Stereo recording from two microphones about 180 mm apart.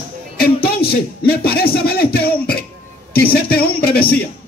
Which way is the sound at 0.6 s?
60° left (ahead or behind).